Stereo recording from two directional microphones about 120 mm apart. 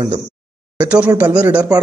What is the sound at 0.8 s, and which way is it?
Speech, 10° right (ahead or behind).